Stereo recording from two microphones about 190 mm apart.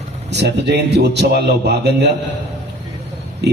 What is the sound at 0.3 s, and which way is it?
A man's voice, 65° right (ahead or behind).